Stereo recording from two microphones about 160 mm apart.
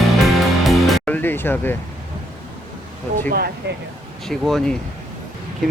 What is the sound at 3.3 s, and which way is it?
Speech, 75° right (ahead or behind).